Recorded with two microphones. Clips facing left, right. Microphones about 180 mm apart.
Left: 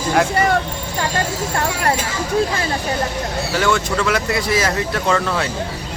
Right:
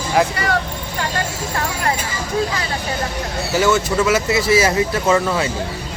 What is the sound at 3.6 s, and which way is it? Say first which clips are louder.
Speech: right 3 dB; 5° right (ahead or behind).